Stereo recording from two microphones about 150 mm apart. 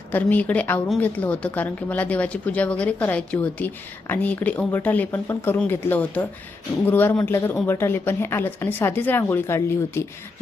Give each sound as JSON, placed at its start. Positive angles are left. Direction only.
{"t": 0.1, "sound": "speech", "side_deg": 10}